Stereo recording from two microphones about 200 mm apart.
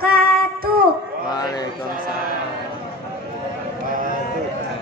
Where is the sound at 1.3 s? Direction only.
20° left (ahead or behind).